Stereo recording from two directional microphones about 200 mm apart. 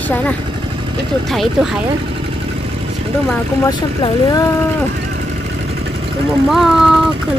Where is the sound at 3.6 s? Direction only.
20° left (ahead or behind).